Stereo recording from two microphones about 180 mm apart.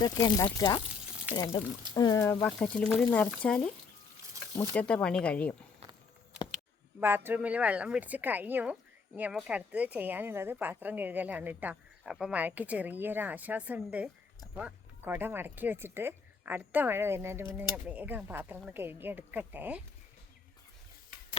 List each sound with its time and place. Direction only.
0.0 s speech: 25° left (ahead or behind)
1.9 s speech: 20° left (ahead or behind)
4.7 s speech: 5° left (ahead or behind)
7.0 s speech: 10° right (ahead or behind)